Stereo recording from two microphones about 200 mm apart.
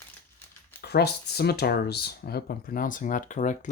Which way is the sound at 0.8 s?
55° left (ahead or behind).